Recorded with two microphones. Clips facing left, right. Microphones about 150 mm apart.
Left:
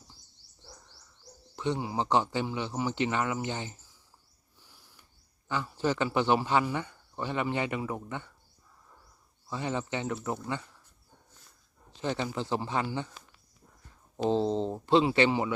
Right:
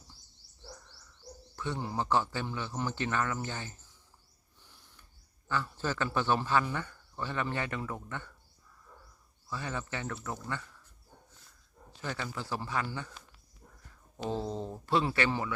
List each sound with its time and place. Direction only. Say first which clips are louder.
1.5 s a man's voice: left 4 dB; 20° left (ahead or behind)
4.6 s a sound: left 1 dB; 10° left (ahead or behind)
5.5 s a man's voice: left 4 dB; 15° left (ahead or behind)
9.5 s speech: left 5 dB; 20° left (ahead or behind)
11.9 s speech: left 6 dB; 20° left (ahead or behind)
14.2 s speech: left 8 dB; 25° left (ahead or behind)